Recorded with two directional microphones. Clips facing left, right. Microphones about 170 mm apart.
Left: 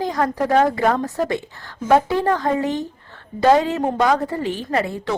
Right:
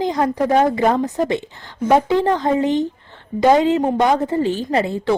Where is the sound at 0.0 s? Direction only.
20° right (ahead or behind).